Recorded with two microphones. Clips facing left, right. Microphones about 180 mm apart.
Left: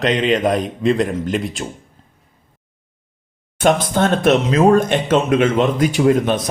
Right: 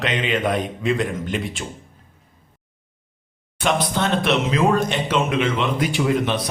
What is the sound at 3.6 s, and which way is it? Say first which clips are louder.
Speech: left 6 dB; 45° left (ahead or behind).